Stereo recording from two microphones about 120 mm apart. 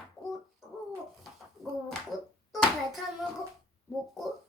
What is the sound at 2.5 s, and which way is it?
Hands, centre (ahead or behind).